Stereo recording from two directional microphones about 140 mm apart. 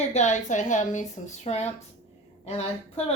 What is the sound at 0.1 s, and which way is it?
Speech, 55° left (ahead or behind).